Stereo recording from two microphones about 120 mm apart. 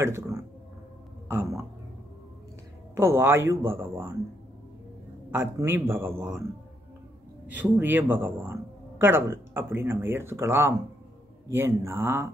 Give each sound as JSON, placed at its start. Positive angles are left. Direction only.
{"t": 0.0, "sound": "speech", "side_deg": -20}
{"t": 2.9, "sound": "speech", "side_deg": -20}
{"t": 5.3, "sound": "speech", "side_deg": -20}
{"t": 7.4, "sound": "speech", "side_deg": -15}